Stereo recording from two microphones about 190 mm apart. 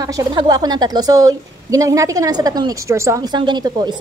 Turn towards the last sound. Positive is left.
turn(degrees=-25)  # may be behind; listen again after turning